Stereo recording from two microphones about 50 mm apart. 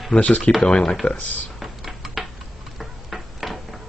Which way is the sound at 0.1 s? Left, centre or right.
Left.